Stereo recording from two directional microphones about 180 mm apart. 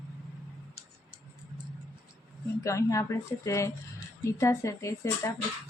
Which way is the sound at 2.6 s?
15° left (ahead or behind).